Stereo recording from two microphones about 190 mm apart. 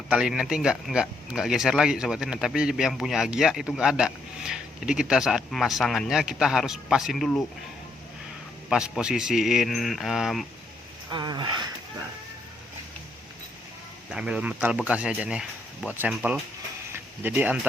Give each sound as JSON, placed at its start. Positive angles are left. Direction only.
{"t": 0.1, "sound": "speech", "side_deg": -5}
{"t": 8.7, "sound": "speech", "side_deg": -5}
{"t": 11.1, "sound": "speech", "side_deg": -25}
{"t": 14.1, "sound": "speech", "side_deg": -5}